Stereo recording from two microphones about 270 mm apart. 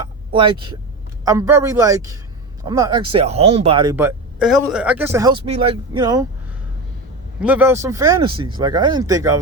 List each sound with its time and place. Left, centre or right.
0.3 s speech: centre
7.4 s speech: centre